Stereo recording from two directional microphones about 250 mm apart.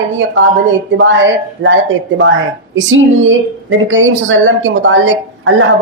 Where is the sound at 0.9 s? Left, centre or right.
Right.